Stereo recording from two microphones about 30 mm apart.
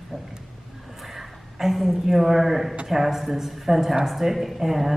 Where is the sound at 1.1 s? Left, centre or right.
Centre.